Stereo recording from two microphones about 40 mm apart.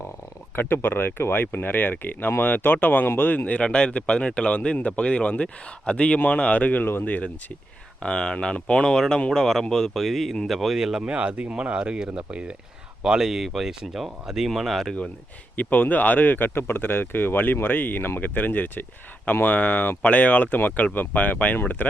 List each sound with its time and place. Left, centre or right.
0.5 s speech: left
3.1 s speech: left
3.3 s speech: left
3.6 s speech: left
6.1 s speech: left
8.0 s speech: left; by 10.8 s centre
10.8 s speech: centre
11.0 s speech: right
13.2 s speech: centre
15.5 s speech: left
19.5 s speech: left